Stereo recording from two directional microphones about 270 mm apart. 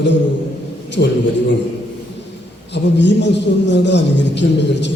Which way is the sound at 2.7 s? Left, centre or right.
Left.